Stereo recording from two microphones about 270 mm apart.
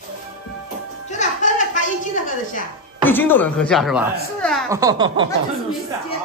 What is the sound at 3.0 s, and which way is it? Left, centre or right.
Speech, centre.